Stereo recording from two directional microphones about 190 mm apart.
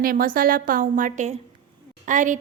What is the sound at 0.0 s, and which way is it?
A woman's voice, 50° right (ahead or behind).